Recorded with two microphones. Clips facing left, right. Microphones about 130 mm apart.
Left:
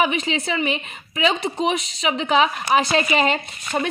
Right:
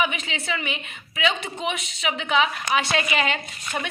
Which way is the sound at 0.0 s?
35° left (ahead or behind).